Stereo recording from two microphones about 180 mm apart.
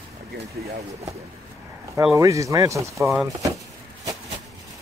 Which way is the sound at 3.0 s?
Centre (ahead or behind).